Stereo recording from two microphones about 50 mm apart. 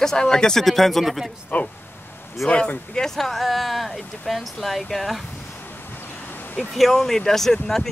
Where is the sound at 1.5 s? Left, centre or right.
Left.